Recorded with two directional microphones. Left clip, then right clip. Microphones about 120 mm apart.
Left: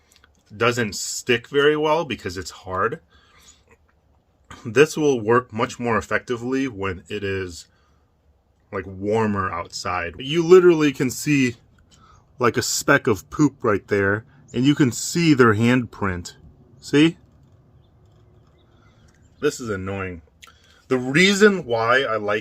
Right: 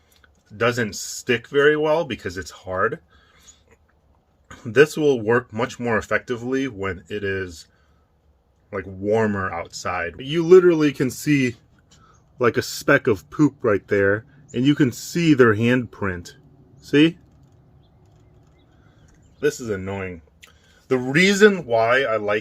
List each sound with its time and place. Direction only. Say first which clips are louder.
0.6 s speech: left 1 dB; 40° left (ahead or behind)
8.7 s speech: right 1 dB; 40° left (ahead or behind)
10.9 s speech: even; 20° left (ahead or behind); by 17.2 s 35° left (ahead or behind)
19.5 s speech: right 1 dB; 25° left (ahead or behind)
21.4 s speech: right 1 dB; 50° left (ahead or behind)